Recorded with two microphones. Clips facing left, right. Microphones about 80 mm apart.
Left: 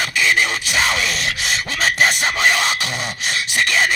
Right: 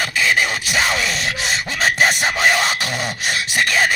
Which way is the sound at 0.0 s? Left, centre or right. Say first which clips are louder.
Even; right.